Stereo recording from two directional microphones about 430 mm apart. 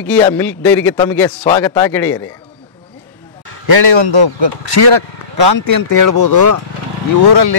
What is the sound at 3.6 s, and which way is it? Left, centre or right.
A man's voice, right.